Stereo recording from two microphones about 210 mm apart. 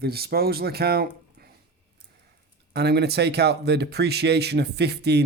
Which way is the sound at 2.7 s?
50° right (ahead or behind).